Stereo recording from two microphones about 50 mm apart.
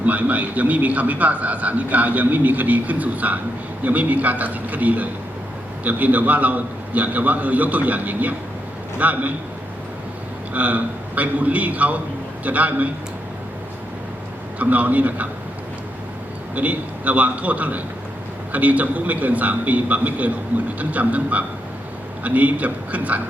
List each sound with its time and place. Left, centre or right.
0.0 s a man's voice: right
10.5 s a man's voice: right
14.6 s a man's voice: right
16.6 s a man's voice: right